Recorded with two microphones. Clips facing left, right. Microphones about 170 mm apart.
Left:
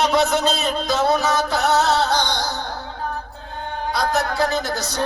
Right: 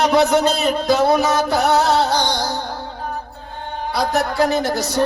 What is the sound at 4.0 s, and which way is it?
Music, 15° right (ahead or behind).